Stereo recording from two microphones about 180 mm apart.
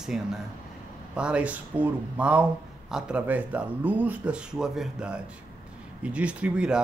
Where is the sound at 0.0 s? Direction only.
Centre (ahead or behind).